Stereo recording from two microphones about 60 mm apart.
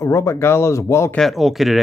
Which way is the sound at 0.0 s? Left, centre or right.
Left.